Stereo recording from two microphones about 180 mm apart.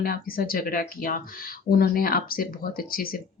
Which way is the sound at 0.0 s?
55° left (ahead or behind).